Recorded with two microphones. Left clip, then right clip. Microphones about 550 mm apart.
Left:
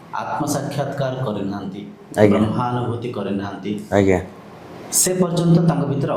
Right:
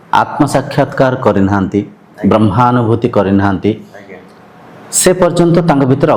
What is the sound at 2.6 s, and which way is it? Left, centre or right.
A man's voice, right.